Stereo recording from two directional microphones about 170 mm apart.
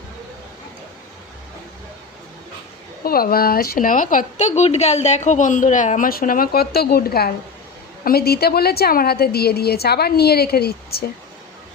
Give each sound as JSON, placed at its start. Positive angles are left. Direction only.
{"t": 3.0, "sound": "a woman's voice", "side_deg": 60}